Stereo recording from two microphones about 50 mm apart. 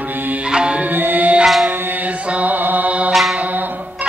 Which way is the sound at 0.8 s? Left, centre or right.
Right.